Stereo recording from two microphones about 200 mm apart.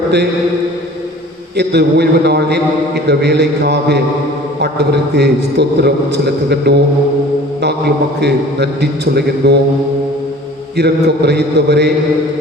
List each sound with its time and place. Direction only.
1.5 s a man's voice: 55° right (ahead or behind)
8.2 s a man's voice: 55° right (ahead or behind)
10.8 s a man's voice: 55° right (ahead or behind)